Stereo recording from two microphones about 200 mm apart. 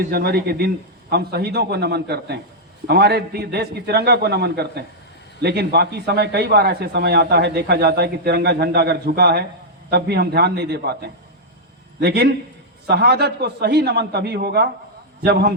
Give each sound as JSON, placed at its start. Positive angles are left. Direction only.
{"t": 0.0, "sound": "a man's voice", "side_deg": -50}